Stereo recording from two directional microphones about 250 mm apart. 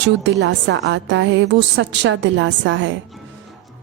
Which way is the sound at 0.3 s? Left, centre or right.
Right.